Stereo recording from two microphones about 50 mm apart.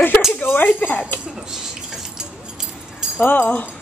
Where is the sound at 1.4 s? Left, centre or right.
Centre.